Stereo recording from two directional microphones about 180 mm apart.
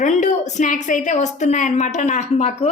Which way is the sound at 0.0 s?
40° left (ahead or behind).